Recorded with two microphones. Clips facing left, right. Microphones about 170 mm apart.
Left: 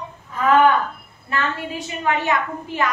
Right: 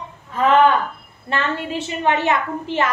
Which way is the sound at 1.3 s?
25° right (ahead or behind).